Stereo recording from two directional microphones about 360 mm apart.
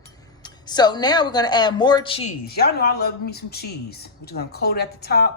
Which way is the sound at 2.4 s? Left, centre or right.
Left.